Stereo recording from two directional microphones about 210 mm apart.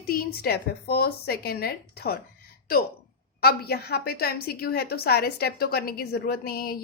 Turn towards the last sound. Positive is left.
turn(degrees=45)  # may be behind; listen again after turning